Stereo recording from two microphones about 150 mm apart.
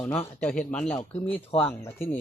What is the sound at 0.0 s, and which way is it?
Speech, 10° left (ahead or behind).